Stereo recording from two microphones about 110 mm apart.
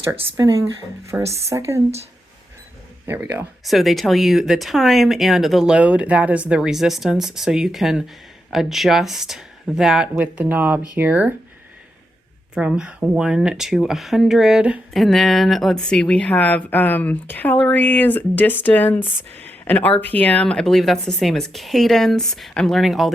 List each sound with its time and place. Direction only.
0.0 s speech: 25° right (ahead or behind)
3.1 s speech: 15° right (ahead or behind)
3.6 s speech: centre (ahead or behind)
10.2 s speech: 15° right (ahead or behind)
12.5 s speech: 10° right (ahead or behind)